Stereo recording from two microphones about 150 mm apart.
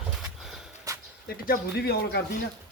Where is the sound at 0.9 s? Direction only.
20° right (ahead or behind).